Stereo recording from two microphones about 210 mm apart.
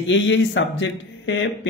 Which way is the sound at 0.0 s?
65° left (ahead or behind).